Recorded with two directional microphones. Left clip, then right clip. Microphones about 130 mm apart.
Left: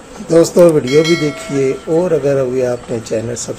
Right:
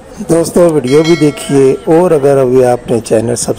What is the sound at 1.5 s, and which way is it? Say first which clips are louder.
Speech: right 7 dB; 60° right (ahead or behind).